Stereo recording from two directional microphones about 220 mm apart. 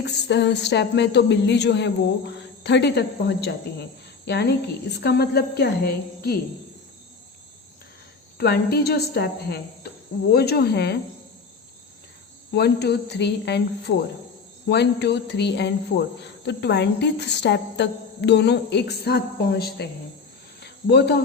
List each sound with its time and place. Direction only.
0.0 s speech: 50° left (ahead or behind)
8.4 s speech: 45° left (ahead or behind)
12.5 s speech: 50° left (ahead or behind)
20.6 s a sound: 50° left (ahead or behind)